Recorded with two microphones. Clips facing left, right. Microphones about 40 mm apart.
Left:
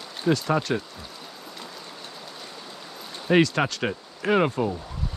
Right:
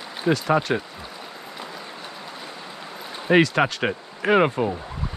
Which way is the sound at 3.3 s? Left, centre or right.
Centre.